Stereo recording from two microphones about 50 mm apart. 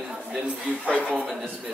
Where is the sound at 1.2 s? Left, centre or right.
Centre.